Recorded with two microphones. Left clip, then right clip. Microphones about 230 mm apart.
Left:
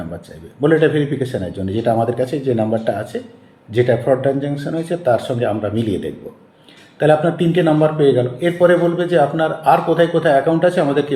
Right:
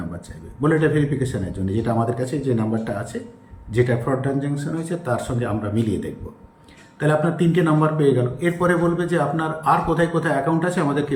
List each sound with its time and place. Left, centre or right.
0.6 s a man's voice: centre